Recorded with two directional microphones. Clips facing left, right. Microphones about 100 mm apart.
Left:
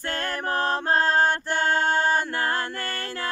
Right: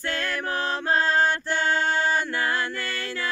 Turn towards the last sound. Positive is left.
turn(degrees=45)  # may be behind; listen again after turning